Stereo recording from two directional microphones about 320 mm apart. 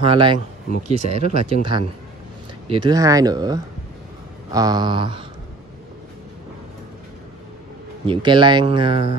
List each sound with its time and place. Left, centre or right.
0.0 s speech: centre
8.1 s speech: centre